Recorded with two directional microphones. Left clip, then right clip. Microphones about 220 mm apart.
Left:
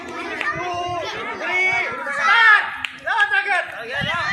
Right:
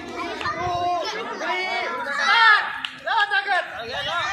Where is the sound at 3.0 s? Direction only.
5° left (ahead or behind).